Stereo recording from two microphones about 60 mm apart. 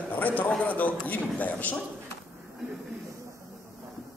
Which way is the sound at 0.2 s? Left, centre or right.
Left.